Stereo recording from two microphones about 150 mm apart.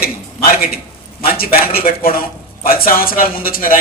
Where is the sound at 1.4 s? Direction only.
80° left.